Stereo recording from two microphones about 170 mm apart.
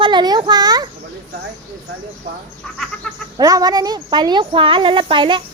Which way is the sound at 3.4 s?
20° right (ahead or behind).